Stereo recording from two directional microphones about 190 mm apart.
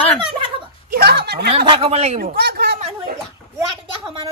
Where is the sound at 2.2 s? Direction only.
55° right (ahead or behind).